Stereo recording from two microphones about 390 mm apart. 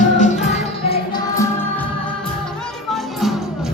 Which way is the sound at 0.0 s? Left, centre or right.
Centre.